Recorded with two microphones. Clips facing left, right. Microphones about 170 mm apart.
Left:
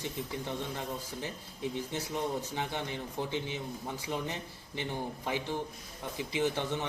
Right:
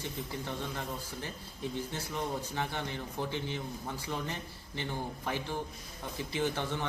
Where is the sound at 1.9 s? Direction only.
15° left (ahead or behind).